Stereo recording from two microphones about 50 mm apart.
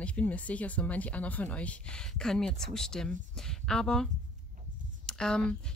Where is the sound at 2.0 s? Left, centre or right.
Centre.